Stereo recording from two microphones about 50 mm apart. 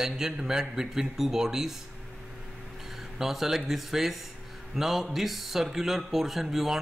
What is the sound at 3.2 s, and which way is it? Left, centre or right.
A man's voice, centre.